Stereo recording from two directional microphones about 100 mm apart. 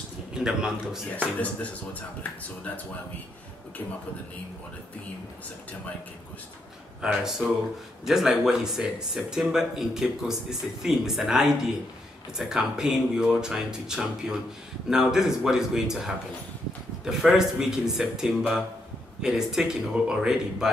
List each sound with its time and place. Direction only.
0.3 s speech: 5° right (ahead or behind)
1.1 s speech: 15° left (ahead or behind)
7.0 s speech: 5° right (ahead or behind)